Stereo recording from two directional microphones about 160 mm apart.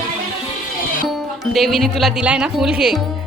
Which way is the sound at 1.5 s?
Centre (ahead or behind).